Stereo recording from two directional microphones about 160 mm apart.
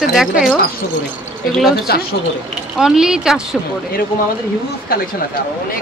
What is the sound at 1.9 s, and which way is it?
Speech, 75° left (ahead or behind).